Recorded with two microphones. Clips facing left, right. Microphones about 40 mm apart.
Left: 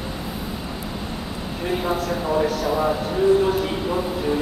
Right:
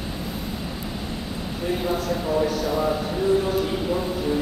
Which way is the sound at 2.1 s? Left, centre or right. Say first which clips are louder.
Left 1 dB; centre.